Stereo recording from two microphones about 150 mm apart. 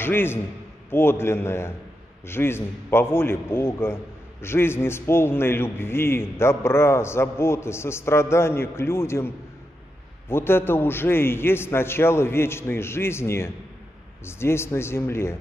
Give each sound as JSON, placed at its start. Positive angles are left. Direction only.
{"t": 0.0, "sound": "a man's voice", "side_deg": 15}